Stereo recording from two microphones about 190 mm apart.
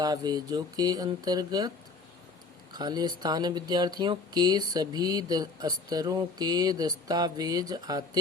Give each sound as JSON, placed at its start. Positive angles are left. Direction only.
{"t": 0.0, "sound": "speech", "side_deg": -20}
{"t": 2.7, "sound": "speech", "side_deg": -20}